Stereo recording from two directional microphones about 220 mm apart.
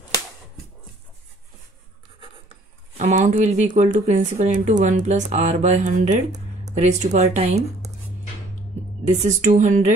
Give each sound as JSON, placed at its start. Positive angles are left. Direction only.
{"t": 3.0, "sound": "speech", "side_deg": -35}
{"t": 9.2, "sound": "speech", "side_deg": -35}